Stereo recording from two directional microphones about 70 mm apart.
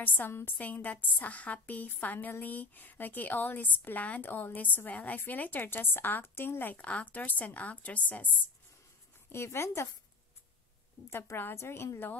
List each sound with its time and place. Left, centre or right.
0.0 s a woman's voice: left
0.6 s a woman's voice: left
9.3 s a woman's voice: left
11.1 s a woman's voice: left